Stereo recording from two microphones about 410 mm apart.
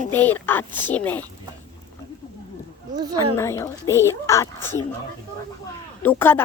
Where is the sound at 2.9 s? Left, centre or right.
Centre.